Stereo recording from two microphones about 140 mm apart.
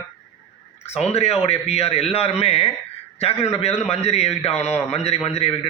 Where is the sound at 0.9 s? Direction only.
50° left (ahead or behind).